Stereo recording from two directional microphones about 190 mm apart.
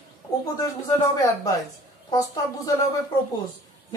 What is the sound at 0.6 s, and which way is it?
Speech, 20° left (ahead or behind).